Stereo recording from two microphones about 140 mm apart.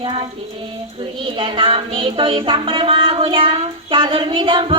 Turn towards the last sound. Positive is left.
turn(degrees=-35)  # may be behind; listen again after turning